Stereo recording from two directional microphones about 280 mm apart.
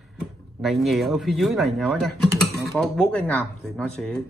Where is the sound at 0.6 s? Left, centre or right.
Centre.